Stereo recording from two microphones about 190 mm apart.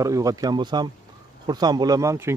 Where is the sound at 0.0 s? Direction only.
15° right (ahead or behind).